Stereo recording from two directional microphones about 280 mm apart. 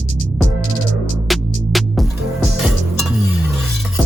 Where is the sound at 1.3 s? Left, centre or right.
Centre.